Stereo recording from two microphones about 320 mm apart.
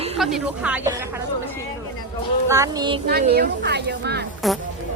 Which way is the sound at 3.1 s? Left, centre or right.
Right.